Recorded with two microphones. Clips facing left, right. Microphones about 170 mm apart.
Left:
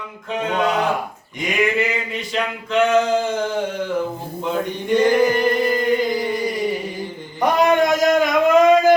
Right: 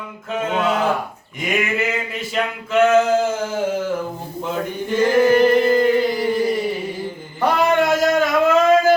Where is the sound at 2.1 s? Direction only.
5° right (ahead or behind).